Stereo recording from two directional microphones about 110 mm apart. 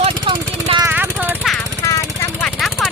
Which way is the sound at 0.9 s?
15° right (ahead or behind).